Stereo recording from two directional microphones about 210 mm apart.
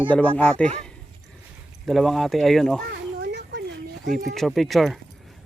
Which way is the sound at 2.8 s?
50° right (ahead or behind).